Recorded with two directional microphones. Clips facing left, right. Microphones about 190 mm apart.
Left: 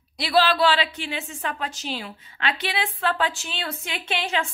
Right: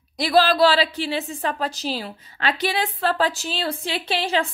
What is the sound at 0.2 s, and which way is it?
A woman's voice, 45° right (ahead or behind).